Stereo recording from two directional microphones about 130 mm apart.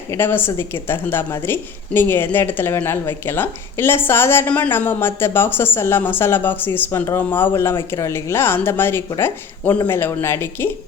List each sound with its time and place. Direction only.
0.1 s a woman's voice: 15° left (ahead or behind)